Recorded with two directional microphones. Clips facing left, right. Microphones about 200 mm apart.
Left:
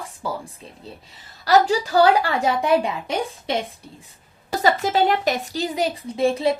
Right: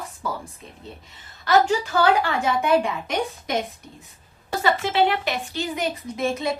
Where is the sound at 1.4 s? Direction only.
35° left (ahead or behind).